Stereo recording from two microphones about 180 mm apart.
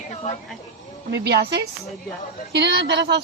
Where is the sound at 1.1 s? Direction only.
70° right (ahead or behind).